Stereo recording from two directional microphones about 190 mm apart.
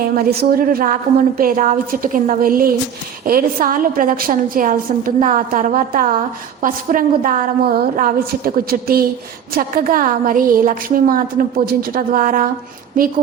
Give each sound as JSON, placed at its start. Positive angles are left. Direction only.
{"t": 0.2, "sound": "a woman's voice", "side_deg": -55}